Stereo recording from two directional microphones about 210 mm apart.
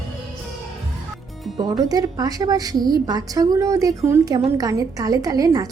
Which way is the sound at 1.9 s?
15° right (ahead or behind).